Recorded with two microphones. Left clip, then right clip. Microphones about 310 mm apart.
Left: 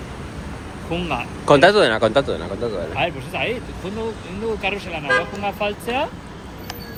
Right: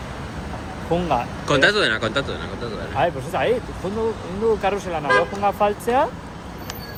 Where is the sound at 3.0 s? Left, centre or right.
Centre.